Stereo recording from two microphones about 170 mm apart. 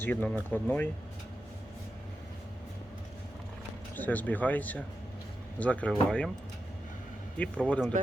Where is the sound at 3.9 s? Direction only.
10° left (ahead or behind).